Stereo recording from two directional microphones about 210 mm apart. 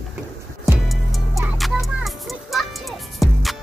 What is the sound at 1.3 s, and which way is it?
Music, centre (ahead or behind).